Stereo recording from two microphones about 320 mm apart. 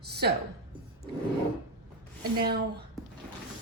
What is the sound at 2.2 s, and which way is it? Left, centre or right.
Speech, right.